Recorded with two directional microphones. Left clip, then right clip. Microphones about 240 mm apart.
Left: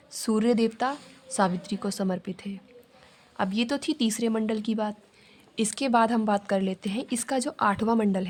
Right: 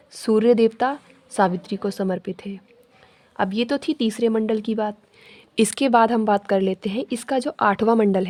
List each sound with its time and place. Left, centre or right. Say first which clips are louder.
0.1 s speech: right 8 dB; right